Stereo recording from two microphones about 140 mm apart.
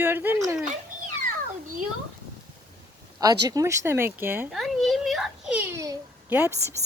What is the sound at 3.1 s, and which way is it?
A child's voice, 25° right (ahead or behind).